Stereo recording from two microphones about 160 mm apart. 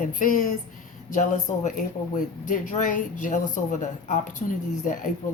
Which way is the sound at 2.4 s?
55° left (ahead or behind).